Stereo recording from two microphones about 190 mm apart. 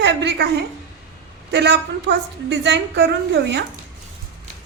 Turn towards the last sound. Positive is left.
turn(degrees=-65)  # may be behind; listen again after turning